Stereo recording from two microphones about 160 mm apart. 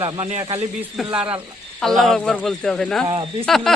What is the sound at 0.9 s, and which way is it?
Speech, 5° right (ahead or behind).